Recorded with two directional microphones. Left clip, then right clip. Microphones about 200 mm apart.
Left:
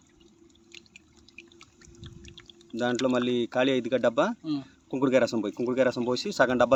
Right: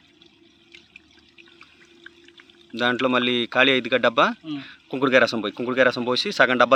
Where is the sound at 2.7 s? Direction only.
Centre (ahead or behind).